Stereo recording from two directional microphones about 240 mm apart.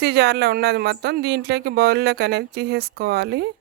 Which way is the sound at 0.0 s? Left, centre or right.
Right.